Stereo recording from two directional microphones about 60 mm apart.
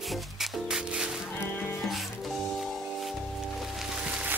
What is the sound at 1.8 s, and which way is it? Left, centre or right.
Music, centre.